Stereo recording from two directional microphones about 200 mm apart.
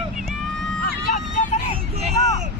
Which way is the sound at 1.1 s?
40° left (ahead or behind).